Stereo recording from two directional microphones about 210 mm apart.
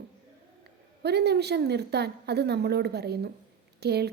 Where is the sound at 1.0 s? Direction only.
50° right (ahead or behind).